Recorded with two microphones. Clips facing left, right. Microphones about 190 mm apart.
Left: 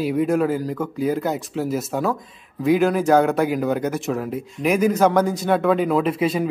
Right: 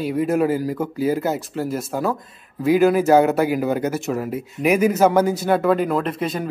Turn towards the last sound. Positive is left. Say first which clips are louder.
# left 3 dB
turn(degrees=0)  # may be behind; listen again after turning